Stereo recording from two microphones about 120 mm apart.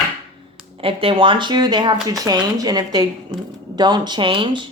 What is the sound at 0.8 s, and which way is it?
A woman's voice, 45° right (ahead or behind).